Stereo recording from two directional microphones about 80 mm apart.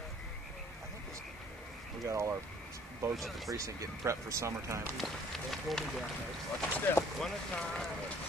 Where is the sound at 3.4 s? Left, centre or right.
Right.